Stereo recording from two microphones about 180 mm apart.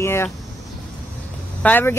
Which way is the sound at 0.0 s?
15° left (ahead or behind).